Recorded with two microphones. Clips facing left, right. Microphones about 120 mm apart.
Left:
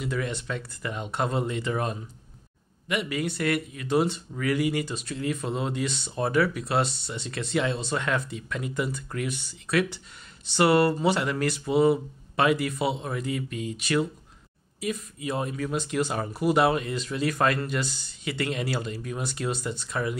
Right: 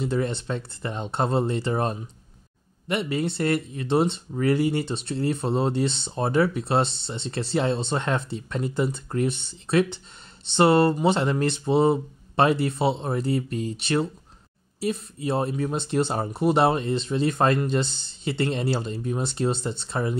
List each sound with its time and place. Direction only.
0.0 s speech: 30° right (ahead or behind)